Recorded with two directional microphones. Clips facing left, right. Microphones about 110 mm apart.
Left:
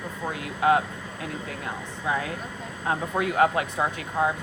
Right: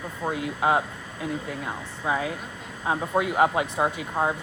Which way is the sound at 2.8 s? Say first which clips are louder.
Right 2 dB; 15° right (ahead or behind).